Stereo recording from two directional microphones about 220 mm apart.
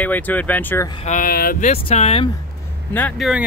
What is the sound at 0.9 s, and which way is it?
Speech, 35° left (ahead or behind).